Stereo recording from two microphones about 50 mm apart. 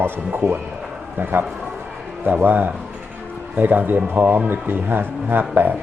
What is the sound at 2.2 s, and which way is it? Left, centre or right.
Speech, right.